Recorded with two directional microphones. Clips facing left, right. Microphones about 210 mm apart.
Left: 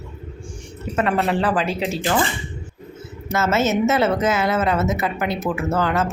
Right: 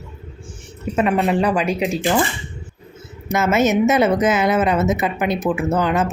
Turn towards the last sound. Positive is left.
turn(degrees=-15)  # may be behind; listen again after turning